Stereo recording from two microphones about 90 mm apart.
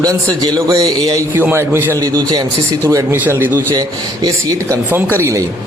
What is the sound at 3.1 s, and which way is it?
Speech, 25° right (ahead or behind).